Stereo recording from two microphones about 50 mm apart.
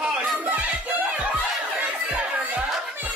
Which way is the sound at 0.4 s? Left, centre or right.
Right.